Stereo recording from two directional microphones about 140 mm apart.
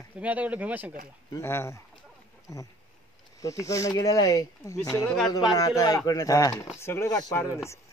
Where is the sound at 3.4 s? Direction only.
25° left (ahead or behind).